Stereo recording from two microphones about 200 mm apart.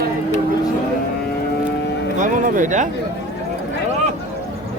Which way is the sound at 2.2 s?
40° right (ahead or behind).